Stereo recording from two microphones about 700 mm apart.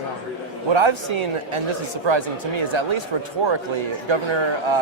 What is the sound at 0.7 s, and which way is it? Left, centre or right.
Speech, right.